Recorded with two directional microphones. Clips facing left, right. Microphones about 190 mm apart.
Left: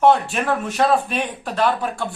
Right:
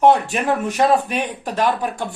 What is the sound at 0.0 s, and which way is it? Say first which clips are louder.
Speech: right 1 dB; 15° right (ahead or behind).